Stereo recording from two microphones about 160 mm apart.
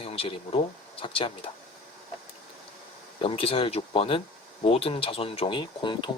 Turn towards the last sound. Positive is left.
turn(degrees=30)  # may be behind; listen again after turning